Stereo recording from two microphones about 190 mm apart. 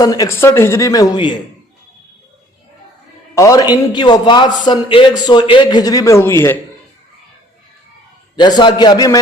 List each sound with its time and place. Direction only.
0.0 s speech: 20° left (ahead or behind)
3.3 s a man's voice: 15° left (ahead or behind)
8.4 s a man's voice: 20° left (ahead or behind)